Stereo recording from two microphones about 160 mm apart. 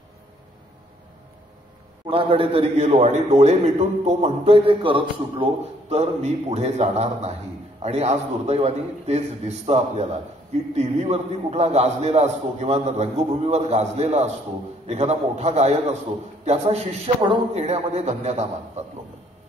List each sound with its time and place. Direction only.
2.0 s a man's voice: 35° right (ahead or behind)